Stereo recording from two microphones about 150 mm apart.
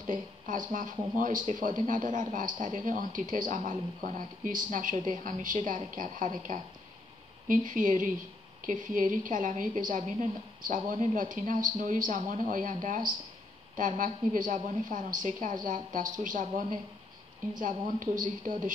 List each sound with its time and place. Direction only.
0.0 s speech: 60° right (ahead or behind)